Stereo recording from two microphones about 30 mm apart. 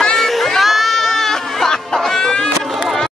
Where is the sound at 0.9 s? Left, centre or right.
Centre.